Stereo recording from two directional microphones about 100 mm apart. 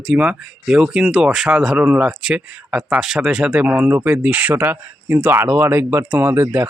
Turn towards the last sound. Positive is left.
turn(degrees=-20)  # may be behind; listen again after turning